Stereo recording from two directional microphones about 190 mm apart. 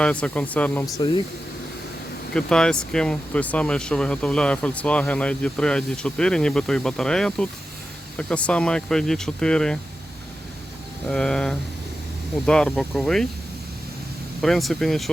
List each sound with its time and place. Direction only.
0.0 s speech: 5° left (ahead or behind)
0.9 s speech: 25° left (ahead or behind)
2.3 s speech: 5° left (ahead or behind)
11.1 s speech: 5° left (ahead or behind)
14.4 s speech: centre (ahead or behind)